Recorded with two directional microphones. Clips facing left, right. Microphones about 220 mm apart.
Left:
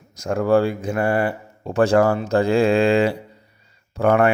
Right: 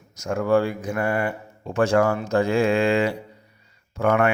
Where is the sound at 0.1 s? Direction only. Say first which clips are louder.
Left 3 dB; 35° left (ahead or behind).